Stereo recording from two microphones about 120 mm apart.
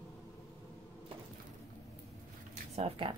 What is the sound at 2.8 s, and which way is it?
Speech, 45° right (ahead or behind).